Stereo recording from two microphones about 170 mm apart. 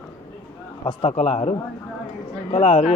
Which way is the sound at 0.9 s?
35° left (ahead or behind).